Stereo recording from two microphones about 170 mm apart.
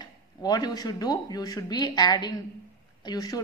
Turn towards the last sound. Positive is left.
turn(degrees=20)  # may be behind; listen again after turning